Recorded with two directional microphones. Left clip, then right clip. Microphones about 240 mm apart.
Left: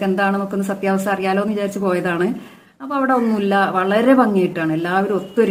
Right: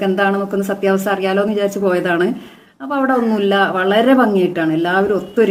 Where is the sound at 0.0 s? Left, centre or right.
Centre.